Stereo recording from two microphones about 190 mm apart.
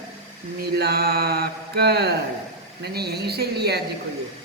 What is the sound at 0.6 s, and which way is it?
Speech, 55° right (ahead or behind).